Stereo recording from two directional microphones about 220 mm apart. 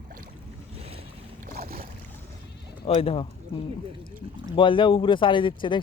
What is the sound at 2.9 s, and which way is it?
Speech, 25° left (ahead or behind).